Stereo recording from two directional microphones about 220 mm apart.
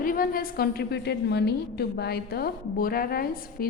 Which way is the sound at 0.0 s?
40° left (ahead or behind).